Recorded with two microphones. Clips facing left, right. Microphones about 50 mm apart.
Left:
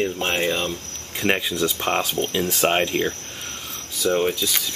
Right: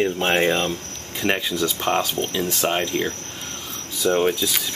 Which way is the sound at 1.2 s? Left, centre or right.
Centre.